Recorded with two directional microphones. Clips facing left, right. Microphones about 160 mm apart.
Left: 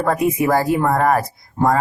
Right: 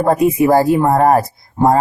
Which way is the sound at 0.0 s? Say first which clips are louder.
Right 5 dB; 30° right (ahead or behind).